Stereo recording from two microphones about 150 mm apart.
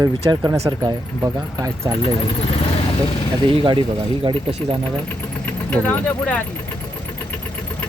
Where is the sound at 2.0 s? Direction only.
40° left (ahead or behind).